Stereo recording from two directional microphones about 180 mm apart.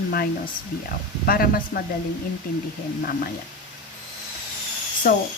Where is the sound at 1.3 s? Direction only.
55° left (ahead or behind).